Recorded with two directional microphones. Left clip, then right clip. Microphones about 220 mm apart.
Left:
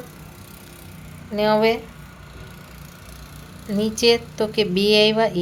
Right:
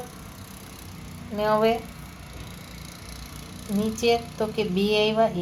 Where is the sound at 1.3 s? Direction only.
35° left (ahead or behind).